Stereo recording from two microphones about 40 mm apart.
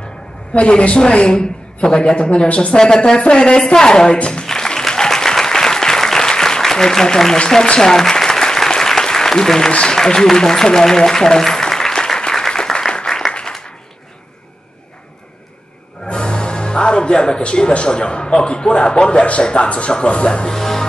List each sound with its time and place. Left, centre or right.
0.6 s a woman's voice: left
2.8 s music: centre
3.2 s a woman's voice: left
4.5 s applause: centre
7.3 s a woman's voice: left
7.8 s applause: centre
9.7 s a woman's voice: left
9.9 s applause: centre
16.1 s a woman's voice: left
20.4 s music: centre